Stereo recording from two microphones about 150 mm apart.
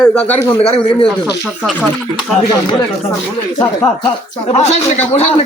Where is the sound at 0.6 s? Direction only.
45° left (ahead or behind).